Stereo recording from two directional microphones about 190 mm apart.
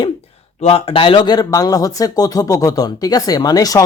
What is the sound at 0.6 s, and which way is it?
Speech, 30° left (ahead or behind).